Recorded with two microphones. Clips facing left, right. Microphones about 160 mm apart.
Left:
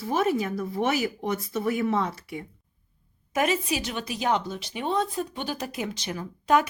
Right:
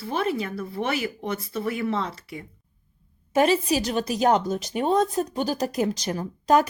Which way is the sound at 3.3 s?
30° right (ahead or behind).